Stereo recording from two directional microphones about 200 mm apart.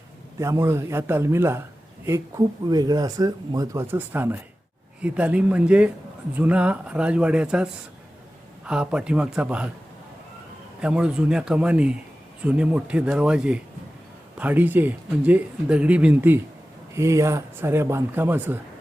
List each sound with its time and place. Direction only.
0.3 s speech: 15° right (ahead or behind)
2.6 s a man's voice: 20° right (ahead or behind)
10.8 s a man's voice: 5° right (ahead or behind)